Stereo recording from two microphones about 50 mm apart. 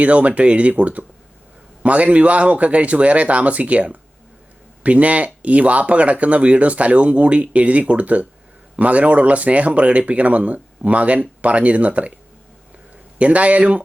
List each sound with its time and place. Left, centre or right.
0.0 s speech: right
13.1 s speech: right